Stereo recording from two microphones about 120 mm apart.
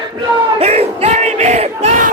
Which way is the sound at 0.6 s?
60° right (ahead or behind).